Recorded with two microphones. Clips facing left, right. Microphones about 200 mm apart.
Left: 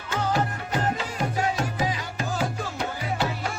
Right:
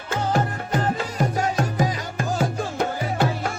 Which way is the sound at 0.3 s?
50° right (ahead or behind).